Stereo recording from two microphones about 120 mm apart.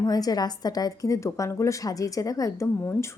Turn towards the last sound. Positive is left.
turn(degrees=20)  # may be behind; listen again after turning